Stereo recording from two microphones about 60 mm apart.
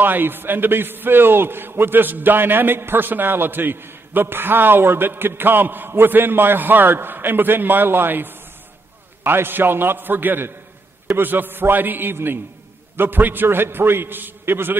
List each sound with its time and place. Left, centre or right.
0.0 s a man's voice: right